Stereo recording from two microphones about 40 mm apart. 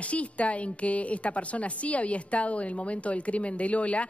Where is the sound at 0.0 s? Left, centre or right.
Left.